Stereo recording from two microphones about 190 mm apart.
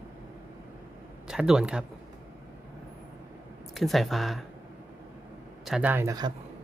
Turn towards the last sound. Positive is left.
turn(degrees=-20)  # may be behind; listen again after turning